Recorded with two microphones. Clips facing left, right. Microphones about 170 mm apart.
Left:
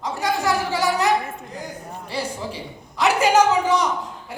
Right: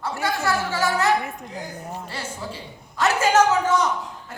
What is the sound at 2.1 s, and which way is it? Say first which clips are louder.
A man's voice: left 5 dB; 15° left (ahead or behind).